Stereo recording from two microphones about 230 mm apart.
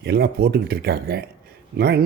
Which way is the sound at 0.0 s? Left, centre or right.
Right.